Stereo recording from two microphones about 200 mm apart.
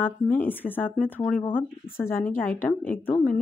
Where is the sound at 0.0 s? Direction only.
10° left (ahead or behind).